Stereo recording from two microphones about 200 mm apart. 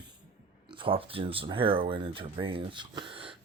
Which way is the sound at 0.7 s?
25° right (ahead or behind).